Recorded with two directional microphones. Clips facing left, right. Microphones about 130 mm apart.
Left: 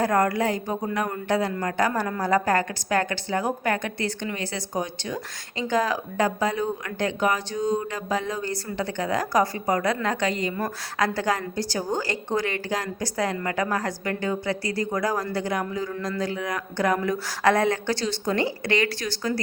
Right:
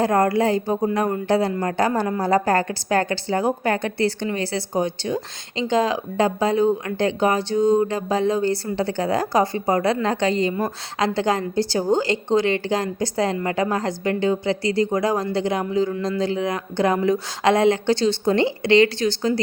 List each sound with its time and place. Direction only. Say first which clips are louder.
0.0 s a man's voice: right 4 dB; 25° right (ahead or behind)